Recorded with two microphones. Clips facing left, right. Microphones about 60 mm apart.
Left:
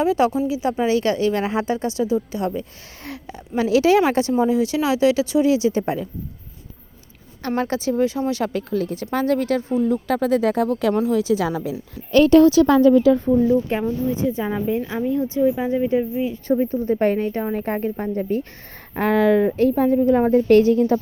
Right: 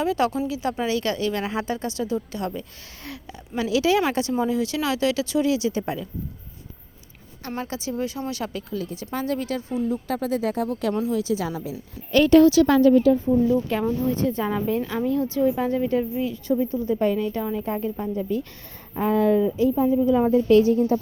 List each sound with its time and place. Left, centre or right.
0.0 s speech: left
3.0 s a woman's voice: left
7.4 s speech: left
7.9 s a woman's voice: left
8.5 s speech: left
9.8 s speech: left
11.0 s a woman's voice: left
13.5 s speech: left
14.1 s speech: centre
16.5 s a woman's voice: left
18.9 s speech: left
20.0 s speech: left
20.7 s speech: left